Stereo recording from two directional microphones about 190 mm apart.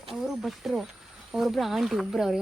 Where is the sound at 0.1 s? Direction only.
Centre (ahead or behind).